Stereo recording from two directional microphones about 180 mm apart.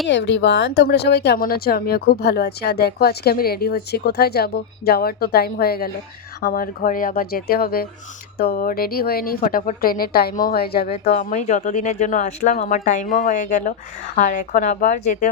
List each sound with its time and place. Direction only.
0.1 s speech: 80° left; by 10.8 s 60° left (ahead or behind)
10.8 s speech: 35° left (ahead or behind)